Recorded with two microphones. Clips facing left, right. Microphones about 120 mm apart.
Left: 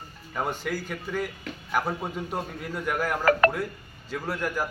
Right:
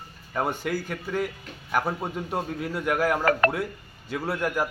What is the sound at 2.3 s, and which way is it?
A man's voice, 5° right (ahead or behind).